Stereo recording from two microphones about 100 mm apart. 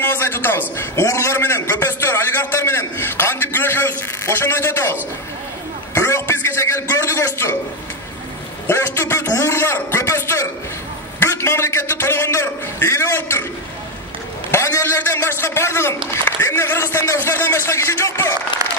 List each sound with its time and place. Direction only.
0.0 s a man's voice: 20° left (ahead or behind)
5.9 s a sound: 25° left (ahead or behind)
8.6 s a man's voice: 25° left (ahead or behind)
14.5 s a man's voice: 30° left (ahead or behind)
18.6 s applause: 40° right (ahead or behind)